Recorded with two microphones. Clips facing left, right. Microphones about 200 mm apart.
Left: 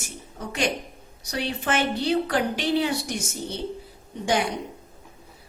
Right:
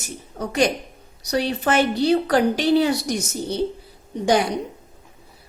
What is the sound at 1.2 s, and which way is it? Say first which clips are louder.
A woman's voice: right 7 dB; 40° right (ahead or behind).